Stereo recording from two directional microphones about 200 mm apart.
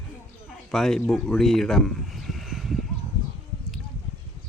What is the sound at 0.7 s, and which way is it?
Speech, centre (ahead or behind).